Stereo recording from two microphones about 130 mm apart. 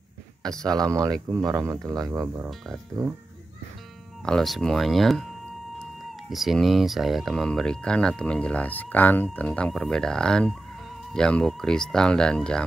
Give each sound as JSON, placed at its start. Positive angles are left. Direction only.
{"t": 0.7, "sound": "speech", "side_deg": -30}
{"t": 4.2, "sound": "speech", "side_deg": 5}
{"t": 6.3, "sound": "speech", "side_deg": 0}